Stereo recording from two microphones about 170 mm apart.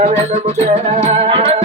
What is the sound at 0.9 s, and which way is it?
Music, 30° right (ahead or behind).